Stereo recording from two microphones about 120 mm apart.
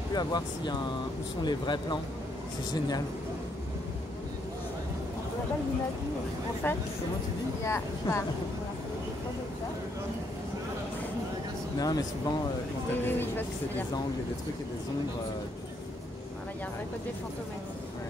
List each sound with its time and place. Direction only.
0.1 s speech: 35° left (ahead or behind)
7.6 s speech: 25° left (ahead or behind)
11.8 s speech: 35° left (ahead or behind)
12.9 s speech: 15° left (ahead or behind)